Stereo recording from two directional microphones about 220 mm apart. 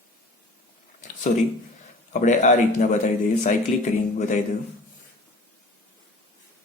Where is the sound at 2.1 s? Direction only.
35° left (ahead or behind).